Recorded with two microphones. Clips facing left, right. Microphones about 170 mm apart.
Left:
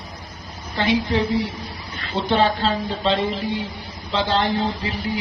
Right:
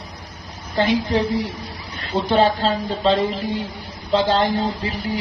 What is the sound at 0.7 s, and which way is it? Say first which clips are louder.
A man's voice: right 2 dB; 40° right (ahead or behind).